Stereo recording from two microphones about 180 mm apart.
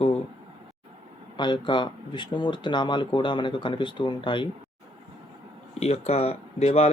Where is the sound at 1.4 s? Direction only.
25° left (ahead or behind).